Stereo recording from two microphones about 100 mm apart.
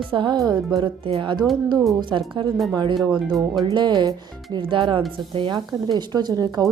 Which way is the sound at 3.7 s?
50° right (ahead or behind).